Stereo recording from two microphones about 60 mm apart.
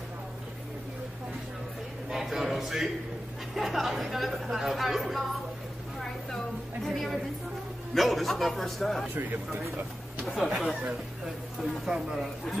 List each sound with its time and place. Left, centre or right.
2.0 s a man's voice: centre
5.9 s a sound: centre
7.9 s a woman's voice: centre
9.1 s speech: right
10.2 s a woman's voice: centre
11.8 s speech: centre